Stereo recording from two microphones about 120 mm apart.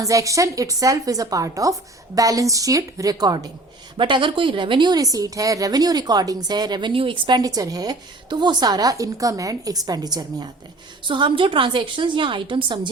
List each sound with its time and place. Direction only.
0.0 s a woman's voice: 25° right (ahead or behind)